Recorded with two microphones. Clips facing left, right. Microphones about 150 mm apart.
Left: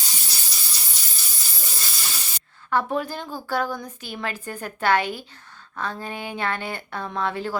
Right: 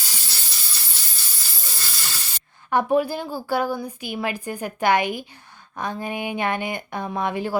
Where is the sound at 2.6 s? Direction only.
15° right (ahead or behind).